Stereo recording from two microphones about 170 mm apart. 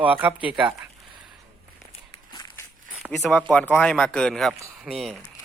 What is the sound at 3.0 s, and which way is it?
Speech, centre (ahead or behind).